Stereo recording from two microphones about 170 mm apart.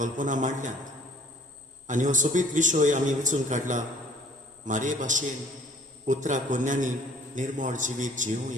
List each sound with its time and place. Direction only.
0.0 s a man's voice: 50° right (ahead or behind)
1.9 s a man's voice: 50° right (ahead or behind)